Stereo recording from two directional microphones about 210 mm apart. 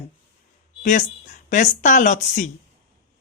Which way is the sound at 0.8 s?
35° left (ahead or behind).